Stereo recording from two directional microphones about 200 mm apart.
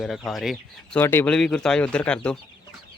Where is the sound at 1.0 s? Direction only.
10° left (ahead or behind).